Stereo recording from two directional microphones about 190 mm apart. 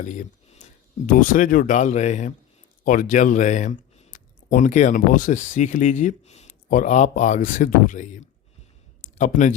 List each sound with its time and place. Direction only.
0.0 s speech: 40° left (ahead or behind)